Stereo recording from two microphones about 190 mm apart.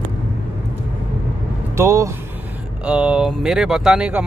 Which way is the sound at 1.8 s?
15° right (ahead or behind).